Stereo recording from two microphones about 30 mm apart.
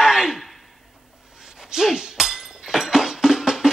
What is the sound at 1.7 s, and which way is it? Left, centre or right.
Chink, right.